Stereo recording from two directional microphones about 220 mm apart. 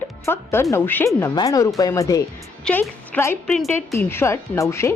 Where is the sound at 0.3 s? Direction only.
10° left (ahead or behind).